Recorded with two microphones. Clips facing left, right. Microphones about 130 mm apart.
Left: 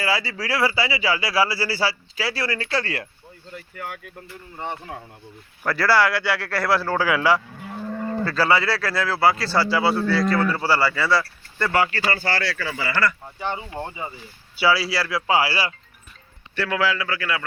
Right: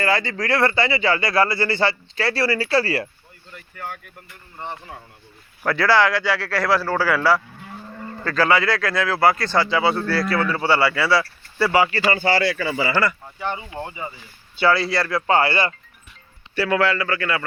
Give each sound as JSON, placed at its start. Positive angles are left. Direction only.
{"t": 0.0, "sound": "speech", "side_deg": 5}
{"t": 5.6, "sound": "speech", "side_deg": 5}
{"t": 7.9, "sound": "livestock", "side_deg": 75}
{"t": 8.2, "sound": "speech", "side_deg": 5}
{"t": 13.7, "sound": "speech", "side_deg": 20}
{"t": 14.6, "sound": "speech", "side_deg": 5}